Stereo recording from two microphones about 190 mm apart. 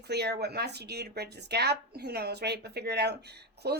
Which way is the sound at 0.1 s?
60° right (ahead or behind).